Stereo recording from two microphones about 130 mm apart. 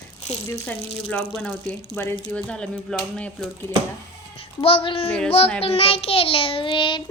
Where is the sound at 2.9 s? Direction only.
5° left (ahead or behind).